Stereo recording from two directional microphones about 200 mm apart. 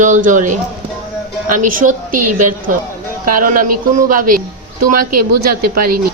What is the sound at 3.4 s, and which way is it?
A woman's voice, 45° right (ahead or behind).